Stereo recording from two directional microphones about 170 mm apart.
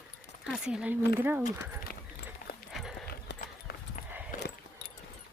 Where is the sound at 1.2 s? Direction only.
10° right (ahead or behind).